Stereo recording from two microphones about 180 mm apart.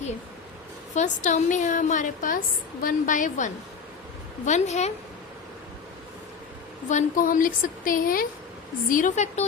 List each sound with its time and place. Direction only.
0.9 s a woman's voice: 40° left (ahead or behind)
6.8 s a woman's voice: 45° left (ahead or behind)